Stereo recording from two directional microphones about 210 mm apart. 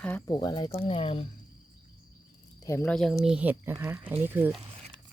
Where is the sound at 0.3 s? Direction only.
20° left (ahead or behind).